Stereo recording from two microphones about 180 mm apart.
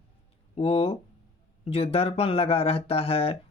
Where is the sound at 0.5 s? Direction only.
35° left (ahead or behind).